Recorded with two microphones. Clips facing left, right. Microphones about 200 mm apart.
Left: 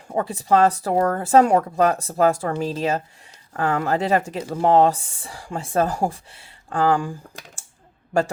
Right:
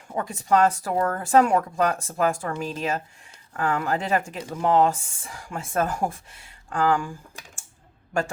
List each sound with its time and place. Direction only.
0.1 s speech: 35° left (ahead or behind)